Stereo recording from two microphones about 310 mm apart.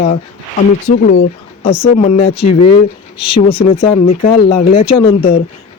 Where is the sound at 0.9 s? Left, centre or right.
Left.